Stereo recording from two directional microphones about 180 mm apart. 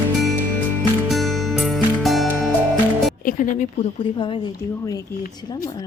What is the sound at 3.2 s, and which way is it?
Speech, 45° left (ahead or behind).